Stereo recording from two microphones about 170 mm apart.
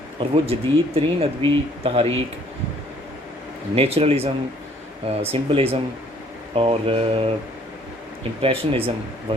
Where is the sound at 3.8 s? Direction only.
35° right (ahead or behind).